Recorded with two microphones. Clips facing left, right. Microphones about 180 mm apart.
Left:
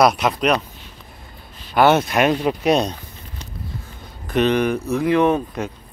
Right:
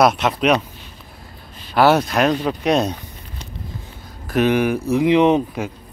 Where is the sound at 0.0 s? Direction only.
Centre (ahead or behind).